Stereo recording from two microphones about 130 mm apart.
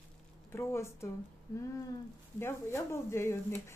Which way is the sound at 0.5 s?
20° left (ahead or behind).